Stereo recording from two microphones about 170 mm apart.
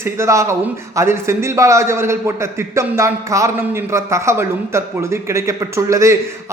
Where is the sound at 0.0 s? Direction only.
15° right (ahead or behind).